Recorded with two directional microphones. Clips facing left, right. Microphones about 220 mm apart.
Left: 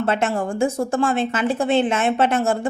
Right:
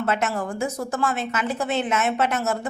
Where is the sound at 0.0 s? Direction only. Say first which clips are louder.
Left 4 dB; 30° left (ahead or behind).